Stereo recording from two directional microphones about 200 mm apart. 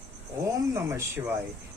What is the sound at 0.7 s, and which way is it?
Speech, 15° right (ahead or behind).